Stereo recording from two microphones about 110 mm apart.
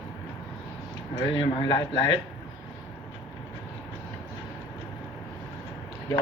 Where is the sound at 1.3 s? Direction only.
45° left (ahead or behind).